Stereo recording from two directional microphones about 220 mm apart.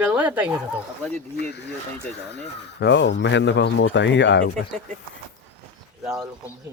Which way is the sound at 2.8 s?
50° left (ahead or behind).